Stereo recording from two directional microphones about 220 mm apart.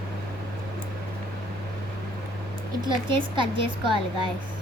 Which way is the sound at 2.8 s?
20° right (ahead or behind).